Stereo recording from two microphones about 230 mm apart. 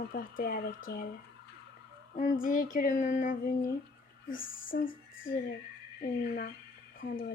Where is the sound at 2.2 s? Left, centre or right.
Left.